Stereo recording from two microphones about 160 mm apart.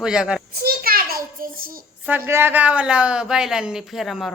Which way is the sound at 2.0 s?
10° right (ahead or behind).